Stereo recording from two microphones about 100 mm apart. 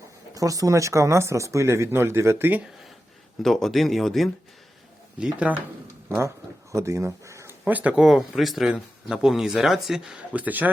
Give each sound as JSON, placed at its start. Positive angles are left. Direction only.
{"t": 0.3, "sound": "speech", "side_deg": -35}
{"t": 3.4, "sound": "speech", "side_deg": 5}
{"t": 5.2, "sound": "speech", "side_deg": -15}
{"t": 6.1, "sound": "speech", "side_deg": -25}
{"t": 7.6, "sound": "speech", "side_deg": -15}
{"t": 8.0, "sound": "speech", "side_deg": -5}
{"t": 10.3, "sound": "speech", "side_deg": -15}